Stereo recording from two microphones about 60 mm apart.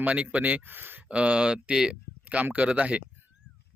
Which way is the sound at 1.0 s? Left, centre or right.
Centre.